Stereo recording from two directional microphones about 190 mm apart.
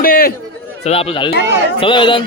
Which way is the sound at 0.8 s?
30° left (ahead or behind).